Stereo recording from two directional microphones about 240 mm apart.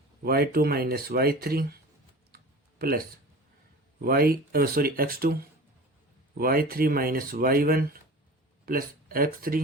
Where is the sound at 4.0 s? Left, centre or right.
Right.